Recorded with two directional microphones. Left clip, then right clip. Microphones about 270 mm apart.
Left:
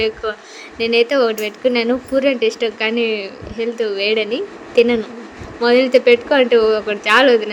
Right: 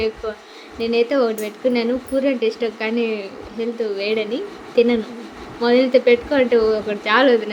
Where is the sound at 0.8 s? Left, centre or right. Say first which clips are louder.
Left 3 dB; left.